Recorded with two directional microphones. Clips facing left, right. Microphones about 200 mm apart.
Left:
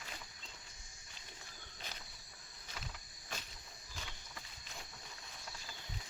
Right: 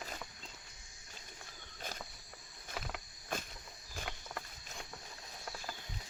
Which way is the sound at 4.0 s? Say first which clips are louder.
Right 9 dB; 65° right (ahead or behind).